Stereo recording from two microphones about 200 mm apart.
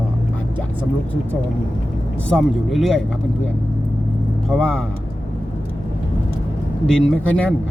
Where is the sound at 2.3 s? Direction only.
Centre (ahead or behind).